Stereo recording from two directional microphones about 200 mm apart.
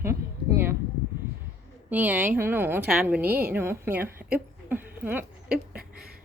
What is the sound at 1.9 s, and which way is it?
A woman's voice, 10° right (ahead or behind).